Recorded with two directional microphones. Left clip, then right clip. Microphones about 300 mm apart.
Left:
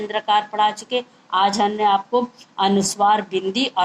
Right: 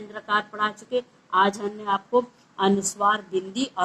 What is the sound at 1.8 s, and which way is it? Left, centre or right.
A woman's voice, left.